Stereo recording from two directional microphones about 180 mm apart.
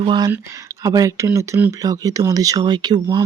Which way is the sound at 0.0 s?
25° right (ahead or behind).